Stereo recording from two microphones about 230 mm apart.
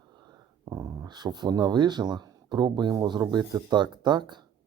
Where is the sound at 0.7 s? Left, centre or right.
Centre.